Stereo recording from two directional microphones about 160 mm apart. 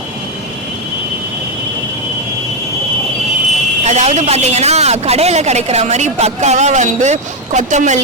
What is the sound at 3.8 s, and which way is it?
A man's voice, 45° right (ahead or behind).